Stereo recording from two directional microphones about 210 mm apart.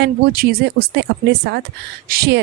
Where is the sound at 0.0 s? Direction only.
50° right (ahead or behind).